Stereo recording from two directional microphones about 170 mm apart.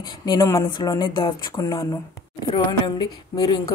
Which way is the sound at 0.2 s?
20° left (ahead or behind).